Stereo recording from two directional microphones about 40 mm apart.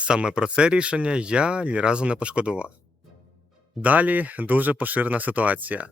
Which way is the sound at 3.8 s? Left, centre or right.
Right.